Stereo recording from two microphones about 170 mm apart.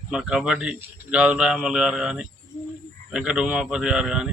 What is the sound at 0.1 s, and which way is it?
A man's voice, 5° right (ahead or behind).